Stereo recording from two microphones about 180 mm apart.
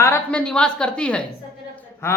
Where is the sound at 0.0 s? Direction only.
10° left (ahead or behind).